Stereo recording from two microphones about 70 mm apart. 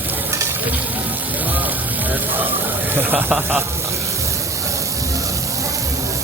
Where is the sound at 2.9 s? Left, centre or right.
Right.